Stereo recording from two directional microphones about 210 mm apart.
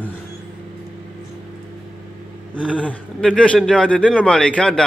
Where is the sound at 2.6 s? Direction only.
5° left (ahead or behind).